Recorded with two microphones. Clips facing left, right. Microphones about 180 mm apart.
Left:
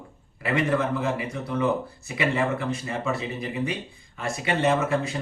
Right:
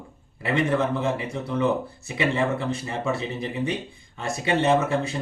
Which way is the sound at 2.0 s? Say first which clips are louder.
Right 1 dB; 25° right (ahead or behind).